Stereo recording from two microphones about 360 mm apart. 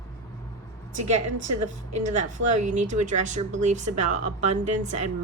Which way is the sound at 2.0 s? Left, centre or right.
Centre.